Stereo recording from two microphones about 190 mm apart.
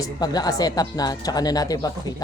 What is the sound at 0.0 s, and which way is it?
Speech, 20° left (ahead or behind).